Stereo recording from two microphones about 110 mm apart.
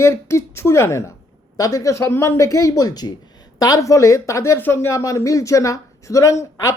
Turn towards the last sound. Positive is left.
turn(degrees=30)  # may be behind; listen again after turning